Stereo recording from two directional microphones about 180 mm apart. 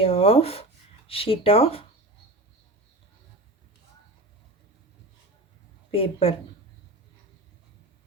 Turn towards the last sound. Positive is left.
turn(degrees=30)  # may be behind; listen again after turning